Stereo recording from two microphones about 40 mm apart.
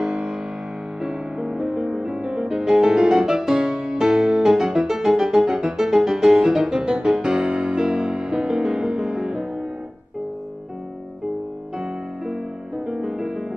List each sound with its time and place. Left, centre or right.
0.0 s music: centre
11.8 s music: centre